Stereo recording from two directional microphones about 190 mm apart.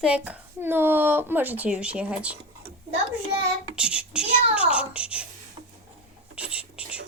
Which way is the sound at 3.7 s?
5° right (ahead or behind).